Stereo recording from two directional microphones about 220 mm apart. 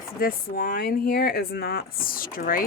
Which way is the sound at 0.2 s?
40° left (ahead or behind).